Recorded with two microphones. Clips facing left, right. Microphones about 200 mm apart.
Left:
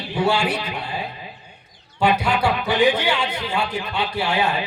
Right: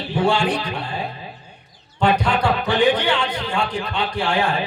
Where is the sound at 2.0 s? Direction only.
10° left (ahead or behind).